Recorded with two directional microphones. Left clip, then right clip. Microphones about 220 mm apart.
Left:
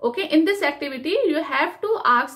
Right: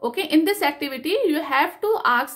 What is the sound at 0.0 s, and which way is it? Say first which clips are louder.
Speech: left 1 dB; 45° right (ahead or behind).